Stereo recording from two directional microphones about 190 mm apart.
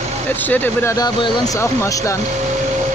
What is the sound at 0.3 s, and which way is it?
Speech, 10° left (ahead or behind).